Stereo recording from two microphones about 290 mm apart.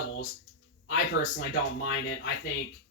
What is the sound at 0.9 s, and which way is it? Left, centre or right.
Speech, left.